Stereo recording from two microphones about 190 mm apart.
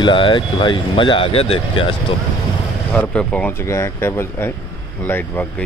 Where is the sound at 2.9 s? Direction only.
5° left (ahead or behind).